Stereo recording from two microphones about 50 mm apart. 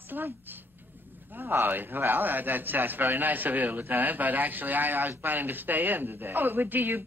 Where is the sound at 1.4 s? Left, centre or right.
Right.